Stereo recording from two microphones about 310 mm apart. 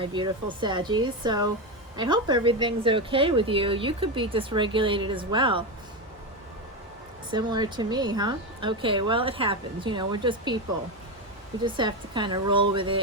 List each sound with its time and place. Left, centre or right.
0.0 s a woman's voice: centre
7.3 s a woman's voice: centre
11.6 s a woman's voice: centre